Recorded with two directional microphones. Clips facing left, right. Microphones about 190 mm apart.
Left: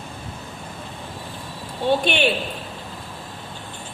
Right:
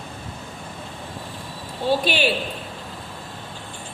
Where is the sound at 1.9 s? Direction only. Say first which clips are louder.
Left 1 dB; 5° right (ahead or behind).